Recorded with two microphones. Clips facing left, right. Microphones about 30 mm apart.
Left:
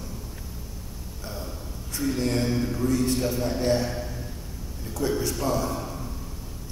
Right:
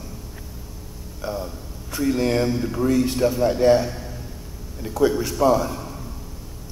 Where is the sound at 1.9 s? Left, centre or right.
Centre.